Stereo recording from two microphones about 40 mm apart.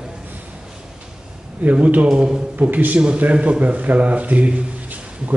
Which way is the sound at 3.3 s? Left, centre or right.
Right.